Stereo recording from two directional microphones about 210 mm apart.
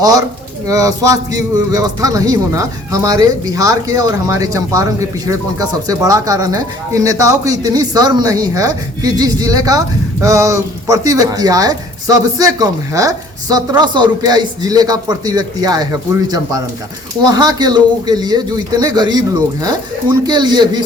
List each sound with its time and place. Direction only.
0.0 s a man's voice: 15° right (ahead or behind)
20.2 s a man's voice: 20° right (ahead or behind)